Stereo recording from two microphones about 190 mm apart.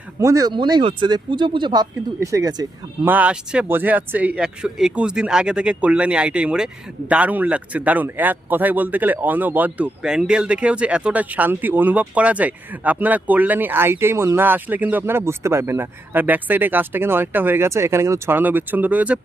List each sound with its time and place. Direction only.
0.2 s speech: 15° right (ahead or behind)
3.1 s a man's voice: 10° right (ahead or behind)